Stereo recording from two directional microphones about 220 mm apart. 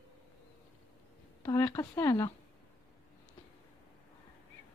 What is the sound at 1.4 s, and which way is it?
Speech, 15° left (ahead or behind).